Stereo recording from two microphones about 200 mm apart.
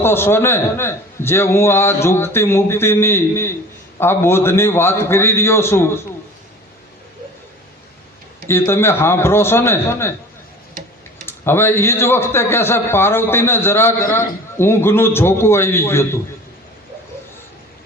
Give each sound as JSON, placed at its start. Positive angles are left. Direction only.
{"t": 0.0, "sound": "a man's voice", "side_deg": 10}
{"t": 8.4, "sound": "a man's voice", "side_deg": 10}
{"t": 11.3, "sound": "a man's voice", "side_deg": 10}